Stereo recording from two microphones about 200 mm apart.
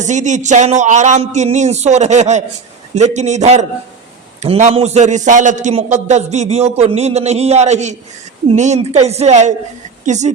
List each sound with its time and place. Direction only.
0.0 s a man's voice: 35° right (ahead or behind)